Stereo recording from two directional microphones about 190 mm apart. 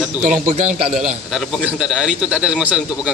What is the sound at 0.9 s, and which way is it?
A man's voice, centre (ahead or behind).